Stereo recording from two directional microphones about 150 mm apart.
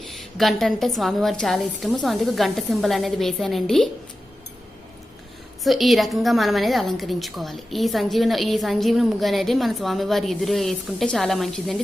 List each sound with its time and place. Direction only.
0.3 s a woman's voice: centre (ahead or behind)
5.6 s a woman's voice: centre (ahead or behind)